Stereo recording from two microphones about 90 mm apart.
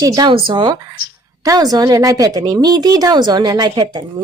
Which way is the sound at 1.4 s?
45° right (ahead or behind).